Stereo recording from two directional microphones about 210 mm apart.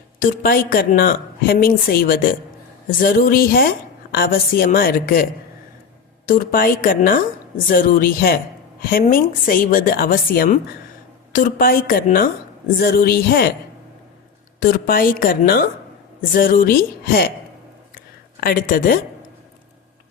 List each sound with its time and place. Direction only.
0.2 s a woman's voice: 40° left (ahead or behind)
14.6 s a woman's voice: 45° left (ahead or behind)
18.3 s a woman's voice: 45° left (ahead or behind)